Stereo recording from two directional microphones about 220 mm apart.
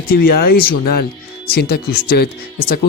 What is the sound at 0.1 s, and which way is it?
Speech, 45° left (ahead or behind).